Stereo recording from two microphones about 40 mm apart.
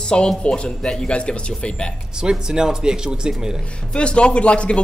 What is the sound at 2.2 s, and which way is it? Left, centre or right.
Speech, centre.